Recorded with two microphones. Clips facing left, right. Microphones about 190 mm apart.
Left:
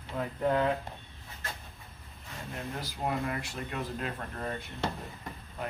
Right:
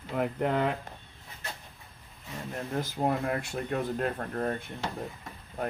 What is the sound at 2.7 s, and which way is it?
Speech, 50° right (ahead or behind).